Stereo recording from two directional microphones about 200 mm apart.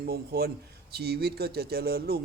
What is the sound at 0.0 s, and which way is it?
A man's voice, 50° right (ahead or behind).